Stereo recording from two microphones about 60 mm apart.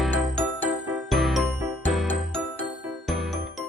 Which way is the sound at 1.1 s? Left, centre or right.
Centre.